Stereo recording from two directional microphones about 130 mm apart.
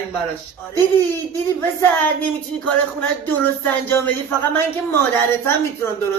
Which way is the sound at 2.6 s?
15° left (ahead or behind).